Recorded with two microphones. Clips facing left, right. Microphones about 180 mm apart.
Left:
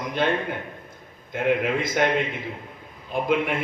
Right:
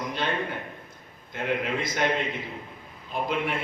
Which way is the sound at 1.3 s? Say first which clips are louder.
Left 5 dB; 50° left (ahead or behind).